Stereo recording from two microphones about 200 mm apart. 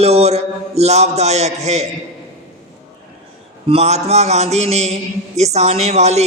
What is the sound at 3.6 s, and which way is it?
A man's voice, 30° right (ahead or behind).